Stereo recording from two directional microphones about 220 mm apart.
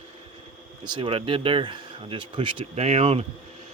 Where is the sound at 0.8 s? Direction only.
20° right (ahead or behind).